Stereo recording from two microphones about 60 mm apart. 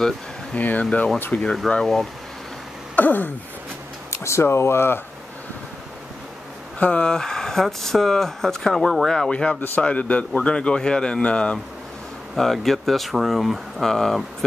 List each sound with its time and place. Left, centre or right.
0.6 s speech: left; by 2.0 s centre
3.0 s a sound: left
4.1 s speech: left
6.8 s speech: centre
9.3 s speech: centre
12.4 s speech: centre